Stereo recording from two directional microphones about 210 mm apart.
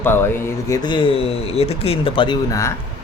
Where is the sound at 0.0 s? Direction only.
10° left (ahead or behind).